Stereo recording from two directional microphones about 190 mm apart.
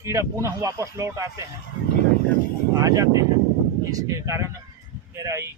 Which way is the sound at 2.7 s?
20° right (ahead or behind).